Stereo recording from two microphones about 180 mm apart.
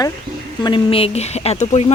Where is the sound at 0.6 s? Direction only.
30° left (ahead or behind).